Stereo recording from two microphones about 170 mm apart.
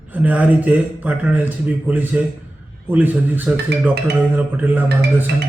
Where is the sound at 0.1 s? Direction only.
10° right (ahead or behind).